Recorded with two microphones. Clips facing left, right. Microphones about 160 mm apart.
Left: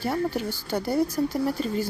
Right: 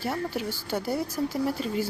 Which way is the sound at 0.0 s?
5° right (ahead or behind).